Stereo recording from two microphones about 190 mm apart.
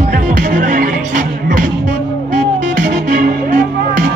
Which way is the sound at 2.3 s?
60° right (ahead or behind).